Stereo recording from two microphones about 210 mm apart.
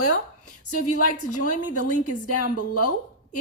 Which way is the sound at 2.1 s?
90° left.